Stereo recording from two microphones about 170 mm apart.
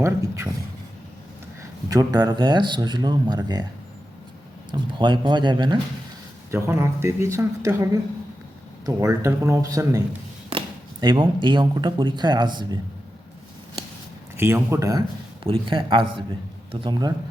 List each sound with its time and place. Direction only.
0.0 s speech: 15° right (ahead or behind)
1.9 s speech: 20° right (ahead or behind)
4.7 s speech: 25° right (ahead or behind)
6.5 s speech: 15° right (ahead or behind)
8.9 s speech: 20° right (ahead or behind)
11.0 s speech: 25° right (ahead or behind)
14.3 s speech: 15° right (ahead or behind)
15.4 s speech: 30° right (ahead or behind)